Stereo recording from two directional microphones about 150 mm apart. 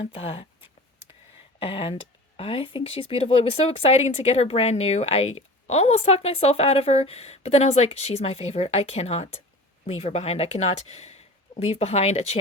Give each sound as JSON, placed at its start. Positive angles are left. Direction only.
{"t": 0.0, "sound": "speech", "side_deg": 40}